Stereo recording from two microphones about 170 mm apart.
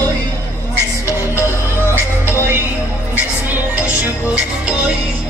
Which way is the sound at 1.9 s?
15° right (ahead or behind).